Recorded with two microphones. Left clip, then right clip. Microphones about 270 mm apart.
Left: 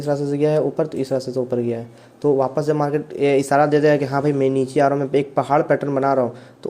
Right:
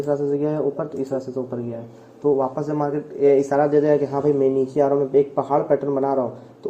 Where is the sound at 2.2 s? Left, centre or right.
Left.